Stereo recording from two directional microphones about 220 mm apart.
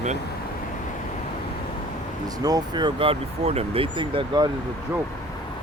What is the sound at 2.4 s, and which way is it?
Speech, 20° right (ahead or behind).